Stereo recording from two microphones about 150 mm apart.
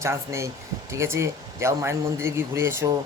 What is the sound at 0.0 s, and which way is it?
Speech, 20° right (ahead or behind).